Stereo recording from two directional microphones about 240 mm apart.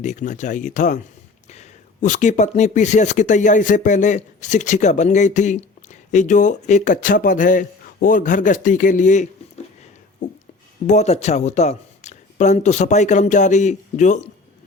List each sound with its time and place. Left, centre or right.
0.0 s speech: left
10.2 s music: left
10.8 s speech: left